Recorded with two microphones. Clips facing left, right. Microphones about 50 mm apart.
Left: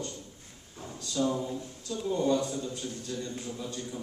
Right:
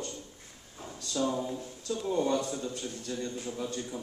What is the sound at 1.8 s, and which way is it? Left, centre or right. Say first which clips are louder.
A man's voice: left 1 dB; right.